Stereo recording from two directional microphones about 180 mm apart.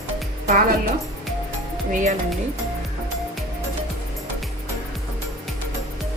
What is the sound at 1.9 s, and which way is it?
Speech, 45° right (ahead or behind).